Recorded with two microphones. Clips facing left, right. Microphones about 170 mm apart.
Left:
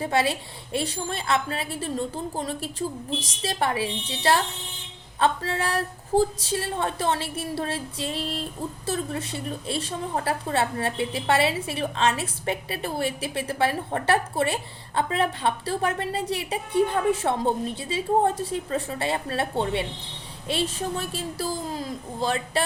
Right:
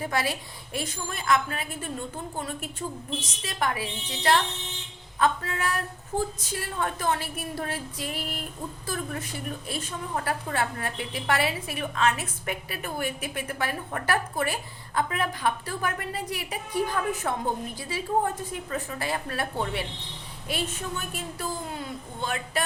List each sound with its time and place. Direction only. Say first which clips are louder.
0.0 s a woman's voice: left 5 dB; 25° left (ahead or behind)